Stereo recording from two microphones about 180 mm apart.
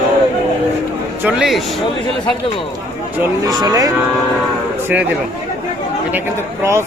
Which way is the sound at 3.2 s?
20° right (ahead or behind).